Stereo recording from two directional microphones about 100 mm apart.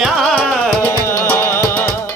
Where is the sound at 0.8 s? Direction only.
25° left (ahead or behind).